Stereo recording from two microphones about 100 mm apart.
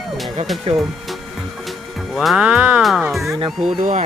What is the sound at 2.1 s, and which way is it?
Speech, centre (ahead or behind).